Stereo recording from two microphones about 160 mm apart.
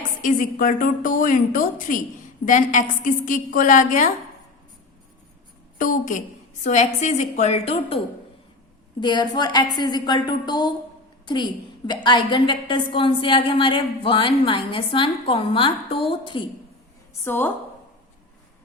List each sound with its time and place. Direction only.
0.2 s a woman's voice: 55° left (ahead or behind)
5.7 s a woman's voice: 55° left (ahead or behind); by 16.5 s 30° left (ahead or behind)
17.2 s a woman's voice: 15° left (ahead or behind)